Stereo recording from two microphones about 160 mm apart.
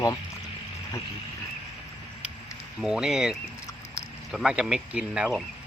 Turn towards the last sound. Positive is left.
turn(degrees=-5)  # may be behind; listen again after turning